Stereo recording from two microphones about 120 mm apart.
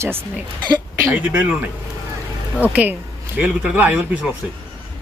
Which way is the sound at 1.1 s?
15° right (ahead or behind).